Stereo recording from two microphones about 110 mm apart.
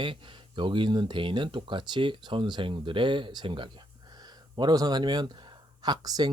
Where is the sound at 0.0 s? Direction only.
45° right (ahead or behind).